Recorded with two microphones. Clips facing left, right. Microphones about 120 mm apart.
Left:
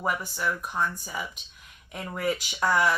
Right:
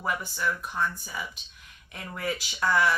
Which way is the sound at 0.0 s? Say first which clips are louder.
Left 1 dB; 15° left (ahead or behind).